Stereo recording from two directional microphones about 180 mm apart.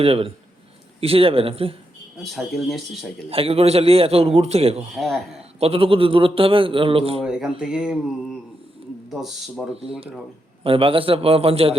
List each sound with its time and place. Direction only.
0.0 s a man's voice: 30° right (ahead or behind)
2.1 s speech: centre (ahead or behind)
3.2 s a man's voice: 35° right (ahead or behind)
4.9 s speech: centre (ahead or behind)
5.5 s a man's voice: 35° right (ahead or behind)
7.2 s speech: 5° right (ahead or behind)
10.6 s a man's voice: 30° right (ahead or behind)